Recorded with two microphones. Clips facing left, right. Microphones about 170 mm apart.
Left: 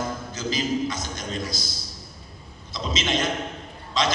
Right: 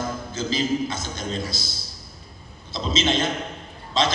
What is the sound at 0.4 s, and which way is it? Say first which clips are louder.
A man's voice: right 2 dB; 30° right (ahead or behind).